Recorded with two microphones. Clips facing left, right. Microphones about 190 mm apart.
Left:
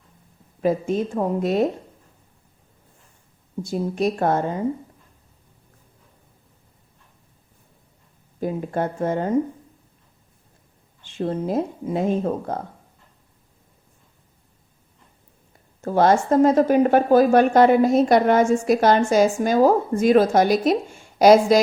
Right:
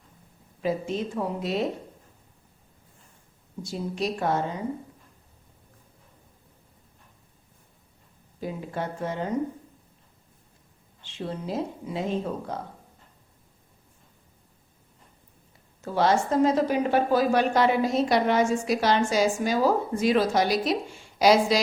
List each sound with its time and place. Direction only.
0.6 s speech: 50° left (ahead or behind)
3.6 s speech: 50° left (ahead or behind)
8.4 s speech: 50° left (ahead or behind)
11.0 s speech: 50° left (ahead or behind)
15.8 s speech: 50° left (ahead or behind)